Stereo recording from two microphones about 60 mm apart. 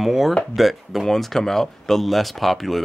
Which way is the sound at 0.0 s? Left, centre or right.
Centre.